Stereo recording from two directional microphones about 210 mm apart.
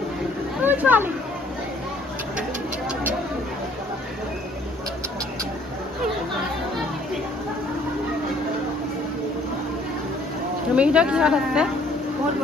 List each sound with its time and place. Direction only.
0.7 s chatter: 10° right (ahead or behind)
10.7 s a woman's voice: 5° right (ahead or behind)